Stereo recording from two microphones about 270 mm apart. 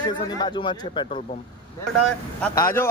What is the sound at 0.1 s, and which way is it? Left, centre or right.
Speech, centre.